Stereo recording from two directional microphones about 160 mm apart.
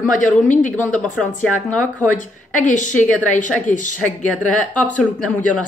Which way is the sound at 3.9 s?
10° left (ahead or behind).